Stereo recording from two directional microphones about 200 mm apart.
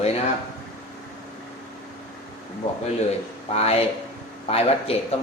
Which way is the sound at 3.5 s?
30° left (ahead or behind).